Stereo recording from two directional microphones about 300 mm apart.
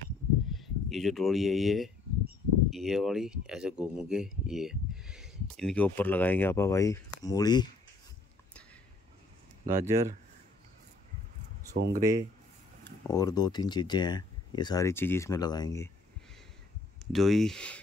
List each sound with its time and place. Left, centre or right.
0.6 s speech: centre
9.7 s speech: centre
11.7 s speech: right
12.0 s speech: centre
13.0 s speech: centre
17.1 s speech: centre